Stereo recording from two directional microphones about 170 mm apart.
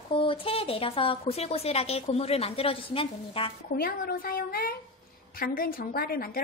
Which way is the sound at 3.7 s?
60° left (ahead or behind).